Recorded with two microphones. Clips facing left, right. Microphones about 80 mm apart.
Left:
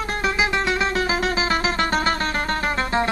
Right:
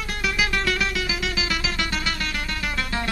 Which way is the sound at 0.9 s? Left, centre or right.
Left.